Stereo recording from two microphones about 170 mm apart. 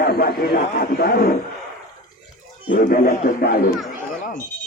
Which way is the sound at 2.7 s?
55° left (ahead or behind).